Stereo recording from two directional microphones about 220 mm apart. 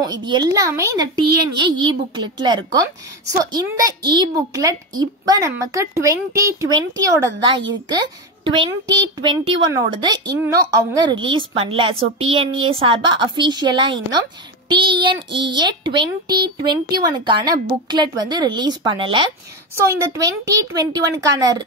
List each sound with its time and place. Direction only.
0.0 s a woman's voice: 20° right (ahead or behind)
19.7 s a woman's voice: 10° right (ahead or behind)